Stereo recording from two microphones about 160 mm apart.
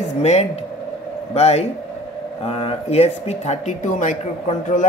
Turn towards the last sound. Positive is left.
turn(degrees=45)  # may be behind; listen again after turning